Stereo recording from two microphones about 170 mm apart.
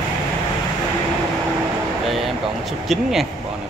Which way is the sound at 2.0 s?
Centre (ahead or behind).